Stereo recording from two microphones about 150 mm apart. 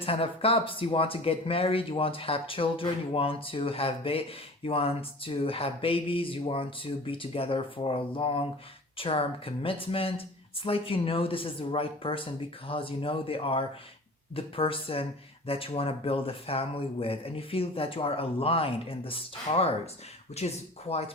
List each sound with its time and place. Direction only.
0.0 s speech: 40° left (ahead or behind)